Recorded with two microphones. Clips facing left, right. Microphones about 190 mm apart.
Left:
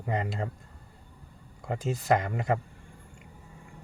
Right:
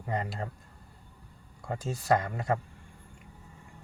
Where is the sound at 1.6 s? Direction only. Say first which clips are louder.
Left 3 dB; 20° left (ahead or behind).